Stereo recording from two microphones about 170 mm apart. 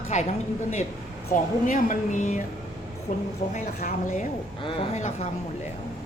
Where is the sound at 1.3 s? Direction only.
50° left (ahead or behind).